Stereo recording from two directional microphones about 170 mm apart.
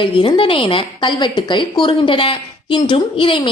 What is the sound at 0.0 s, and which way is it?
A woman's voice, 30° left (ahead or behind).